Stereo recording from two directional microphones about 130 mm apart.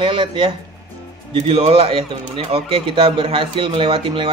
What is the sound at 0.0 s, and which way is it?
Speech, 40° right (ahead or behind).